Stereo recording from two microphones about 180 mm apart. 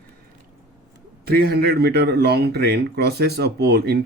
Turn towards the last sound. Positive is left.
turn(degrees=-60)  # may be behind; listen again after turning